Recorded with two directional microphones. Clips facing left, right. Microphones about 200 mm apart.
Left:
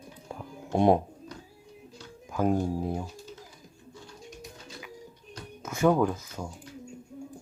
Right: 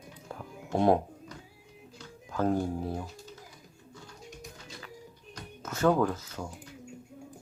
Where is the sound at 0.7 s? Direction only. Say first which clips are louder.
Left 2 dB; 20° left (ahead or behind).